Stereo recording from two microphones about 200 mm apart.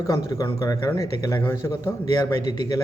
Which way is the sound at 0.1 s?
15° left (ahead or behind).